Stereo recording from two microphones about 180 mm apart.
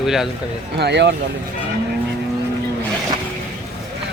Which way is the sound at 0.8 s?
70° right (ahead or behind).